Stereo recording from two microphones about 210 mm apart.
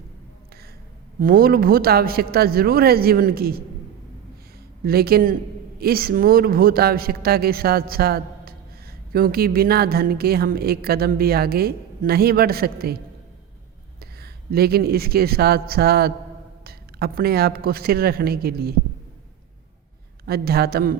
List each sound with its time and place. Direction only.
1.2 s speech: 45° right (ahead or behind)
4.9 s speech: 45° right (ahead or behind)
14.0 s speech: 50° right (ahead or behind)
20.2 s speech: 45° right (ahead or behind)